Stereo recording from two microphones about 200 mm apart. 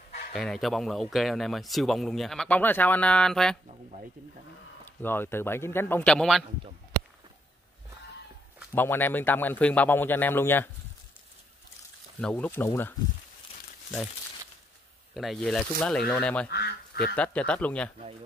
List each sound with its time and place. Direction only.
0.3 s speech: centre (ahead or behind)
5.0 s speech: 10° left (ahead or behind)
8.7 s speech: 10° left (ahead or behind)
12.2 s speech: 5° left (ahead or behind)
15.1 s speech: centre (ahead or behind)
16.4 s speech: 55° left (ahead or behind)
17.1 s speech: 5° left (ahead or behind)